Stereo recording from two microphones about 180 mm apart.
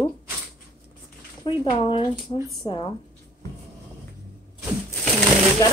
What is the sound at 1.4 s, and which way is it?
A woman's voice, 25° left (ahead or behind).